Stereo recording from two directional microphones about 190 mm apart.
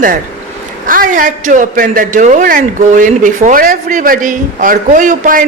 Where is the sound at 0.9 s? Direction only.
45° right (ahead or behind).